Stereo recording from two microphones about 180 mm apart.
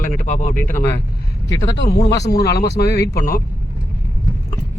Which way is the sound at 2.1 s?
70° left (ahead or behind).